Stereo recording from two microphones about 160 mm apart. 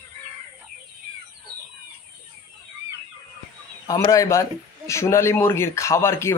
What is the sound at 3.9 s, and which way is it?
A man's voice, 20° left (ahead or behind).